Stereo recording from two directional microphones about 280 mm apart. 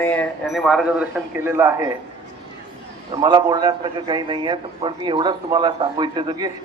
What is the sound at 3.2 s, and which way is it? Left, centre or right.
A man's voice, centre.